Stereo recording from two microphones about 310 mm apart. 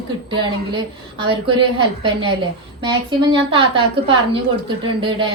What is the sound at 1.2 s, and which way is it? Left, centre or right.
A man's voice, centre.